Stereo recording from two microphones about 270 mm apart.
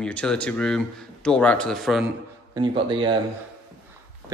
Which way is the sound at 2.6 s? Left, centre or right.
Centre.